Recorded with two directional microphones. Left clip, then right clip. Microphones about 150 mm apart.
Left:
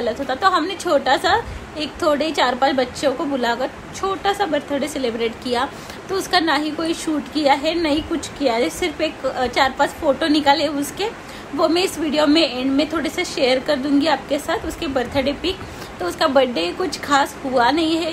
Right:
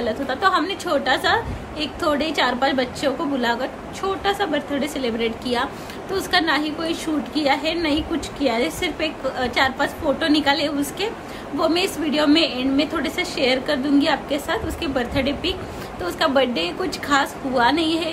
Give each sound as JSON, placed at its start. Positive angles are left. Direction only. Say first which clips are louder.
{"t": 0.0, "sound": "a woman's voice", "louder": "left 2 dB", "side_deg": -10}